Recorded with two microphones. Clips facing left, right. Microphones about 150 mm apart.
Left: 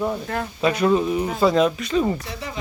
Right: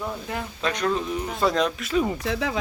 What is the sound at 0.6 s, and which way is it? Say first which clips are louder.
Speech: left 7 dB; 10° left (ahead or behind).